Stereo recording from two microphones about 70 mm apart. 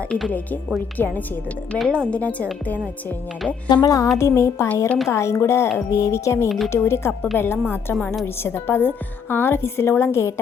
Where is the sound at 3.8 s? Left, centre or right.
Left.